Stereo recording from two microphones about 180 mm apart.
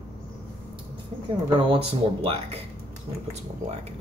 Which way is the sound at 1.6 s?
30° right (ahead or behind).